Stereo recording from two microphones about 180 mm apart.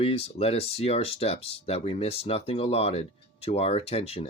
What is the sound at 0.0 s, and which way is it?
Speech, 35° left (ahead or behind).